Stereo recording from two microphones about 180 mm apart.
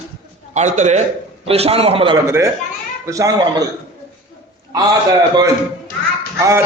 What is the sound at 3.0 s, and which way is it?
Speech, 20° right (ahead or behind).